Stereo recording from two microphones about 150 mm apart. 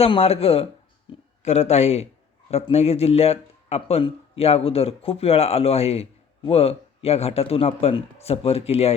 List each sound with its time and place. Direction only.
0.0 s speech: 40° left (ahead or behind)